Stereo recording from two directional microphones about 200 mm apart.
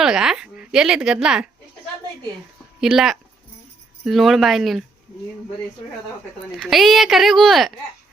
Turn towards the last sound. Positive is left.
turn(degrees=0)  # may be behind; listen again after turning